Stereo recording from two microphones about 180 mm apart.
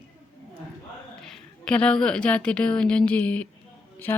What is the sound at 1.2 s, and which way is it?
A woman's voice, 5° left (ahead or behind).